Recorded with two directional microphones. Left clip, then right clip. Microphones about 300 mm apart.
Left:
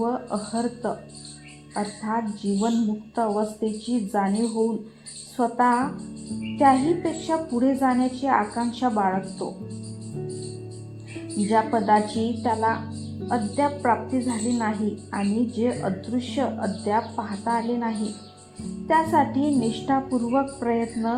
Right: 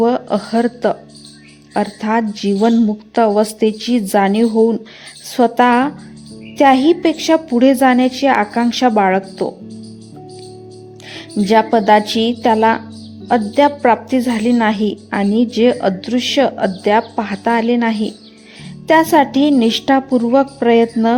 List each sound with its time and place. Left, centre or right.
0.0 s a woman's voice: right
11.4 s a woman's voice: right